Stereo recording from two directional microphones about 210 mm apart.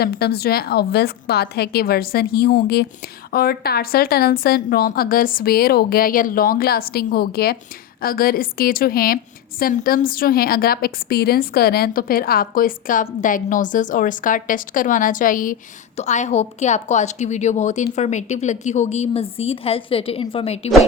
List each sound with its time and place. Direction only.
0.0 s a woman's voice: 50° left (ahead or behind); by 20.7 s 30° left (ahead or behind)